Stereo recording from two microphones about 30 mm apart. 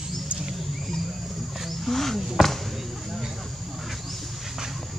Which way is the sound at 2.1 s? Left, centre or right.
Centre.